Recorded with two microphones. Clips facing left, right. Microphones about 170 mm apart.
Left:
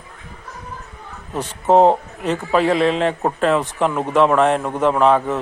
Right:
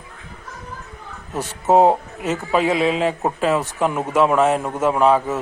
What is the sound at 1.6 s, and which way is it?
Speech, 5° right (ahead or behind).